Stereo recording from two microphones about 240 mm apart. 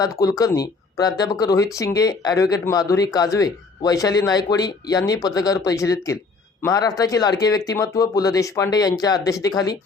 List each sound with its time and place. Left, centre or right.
0.0 s speech: centre